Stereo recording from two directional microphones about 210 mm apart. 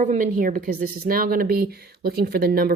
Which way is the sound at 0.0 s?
40° right (ahead or behind).